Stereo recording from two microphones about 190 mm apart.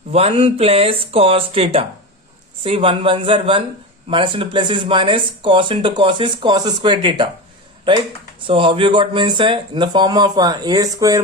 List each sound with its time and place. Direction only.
0.1 s speech: 30° right (ahead or behind)